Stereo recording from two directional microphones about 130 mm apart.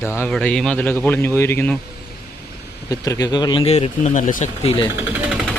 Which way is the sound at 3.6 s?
55° left (ahead or behind).